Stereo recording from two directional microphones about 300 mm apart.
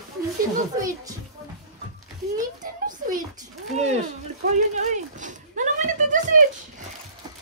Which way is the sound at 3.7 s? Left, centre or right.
Right.